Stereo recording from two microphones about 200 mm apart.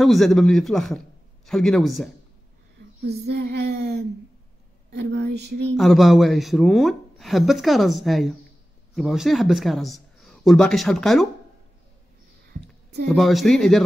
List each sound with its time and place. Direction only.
0.0 s a man's voice: centre (ahead or behind)
3.0 s a sound: 55° right (ahead or behind)
5.8 s a man's voice: centre (ahead or behind)
13.1 s speech: centre (ahead or behind)